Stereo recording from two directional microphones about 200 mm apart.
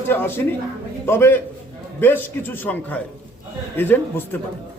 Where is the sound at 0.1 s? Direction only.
10° left (ahead or behind).